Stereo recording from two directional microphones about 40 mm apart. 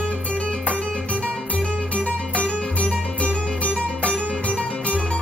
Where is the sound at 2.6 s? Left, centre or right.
Left.